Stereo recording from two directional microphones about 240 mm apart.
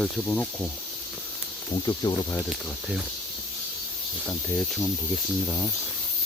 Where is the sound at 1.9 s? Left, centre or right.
Centre.